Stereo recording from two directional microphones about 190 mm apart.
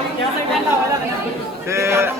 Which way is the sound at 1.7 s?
15° right (ahead or behind).